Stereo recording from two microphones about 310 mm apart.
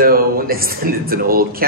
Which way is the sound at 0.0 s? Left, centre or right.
Right.